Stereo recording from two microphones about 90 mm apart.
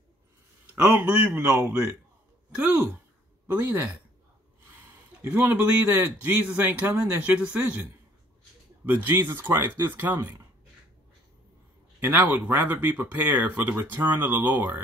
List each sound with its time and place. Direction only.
0.7 s speech: 15° right (ahead or behind)
5.2 s speech: 20° right (ahead or behind)
8.8 s speech: 20° right (ahead or behind)
12.0 s speech: 20° right (ahead or behind)